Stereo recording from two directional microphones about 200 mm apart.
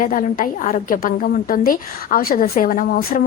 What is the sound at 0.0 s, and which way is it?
A woman's voice, 45° left (ahead or behind).